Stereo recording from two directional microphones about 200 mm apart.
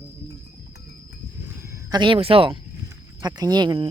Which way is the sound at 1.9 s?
25° right (ahead or behind).